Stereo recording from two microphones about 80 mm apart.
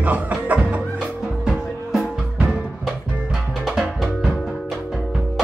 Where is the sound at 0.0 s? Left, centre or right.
Centre.